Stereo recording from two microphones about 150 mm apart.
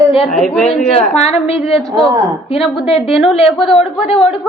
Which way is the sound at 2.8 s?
40° left (ahead or behind).